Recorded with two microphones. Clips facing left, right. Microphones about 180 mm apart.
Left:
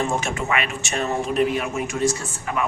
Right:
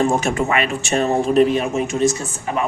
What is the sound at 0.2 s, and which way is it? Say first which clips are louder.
Speech: right 5 dB; 40° right (ahead or behind).